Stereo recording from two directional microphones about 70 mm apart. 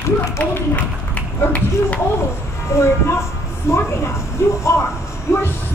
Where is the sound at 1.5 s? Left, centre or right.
Left.